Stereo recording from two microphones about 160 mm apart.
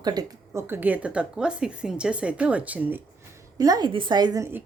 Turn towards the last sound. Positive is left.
turn(degrees=-20)  # may be behind; listen again after turning